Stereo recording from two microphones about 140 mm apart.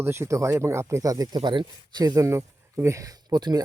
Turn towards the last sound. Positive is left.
turn(degrees=-30)  # may be behind; listen again after turning